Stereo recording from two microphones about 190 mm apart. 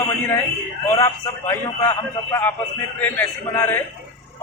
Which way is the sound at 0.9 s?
15° left (ahead or behind).